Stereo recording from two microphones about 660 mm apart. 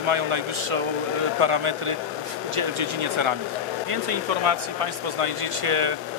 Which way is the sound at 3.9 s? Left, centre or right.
Right.